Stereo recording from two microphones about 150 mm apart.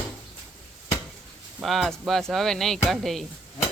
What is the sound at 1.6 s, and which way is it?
Speech, centre (ahead or behind).